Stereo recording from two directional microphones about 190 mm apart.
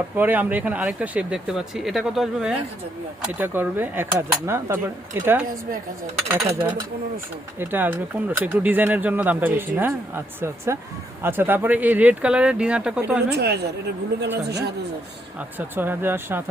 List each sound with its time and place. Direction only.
0.2 s speech: 10° right (ahead or behind)
13.3 s a woman's voice: 60° right (ahead or behind)
15.4 s speech: 10° right (ahead or behind)